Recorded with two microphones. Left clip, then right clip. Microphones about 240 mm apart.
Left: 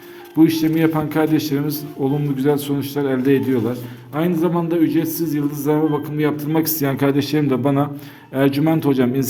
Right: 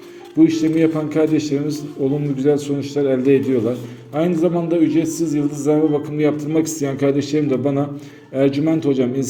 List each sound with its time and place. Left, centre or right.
0.3 s a man's voice: left